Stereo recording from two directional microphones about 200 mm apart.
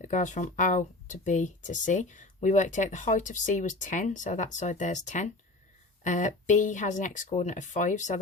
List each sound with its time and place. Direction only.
0.0 s speech: 40° left (ahead or behind)